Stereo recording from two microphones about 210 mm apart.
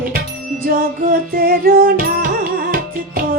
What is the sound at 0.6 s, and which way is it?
Music, 45° right (ahead or behind).